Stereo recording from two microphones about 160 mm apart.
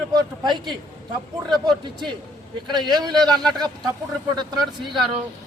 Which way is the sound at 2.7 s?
25° right (ahead or behind).